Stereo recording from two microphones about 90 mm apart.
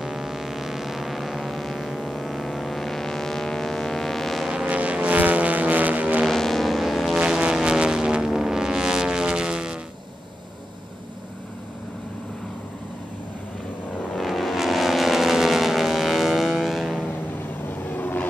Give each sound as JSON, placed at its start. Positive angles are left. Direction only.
{"t": 0.0, "sound": "vehicle", "side_deg": -5}
{"t": 6.2, "sound": "vehicle", "side_deg": 5}
{"t": 14.1, "sound": "vehicle", "side_deg": 0}
{"t": 17.8, "sound": "vehicle", "side_deg": 20}